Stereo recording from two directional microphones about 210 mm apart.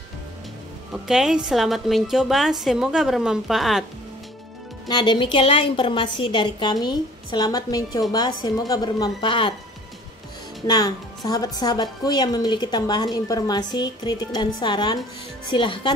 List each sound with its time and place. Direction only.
1.0 s a woman's voice: 5° right (ahead or behind)
4.8 s a woman's voice: 20° left (ahead or behind)
10.7 s a woman's voice: 20° left (ahead or behind)